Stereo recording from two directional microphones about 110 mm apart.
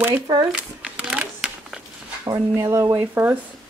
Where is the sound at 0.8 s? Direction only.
10° right (ahead or behind).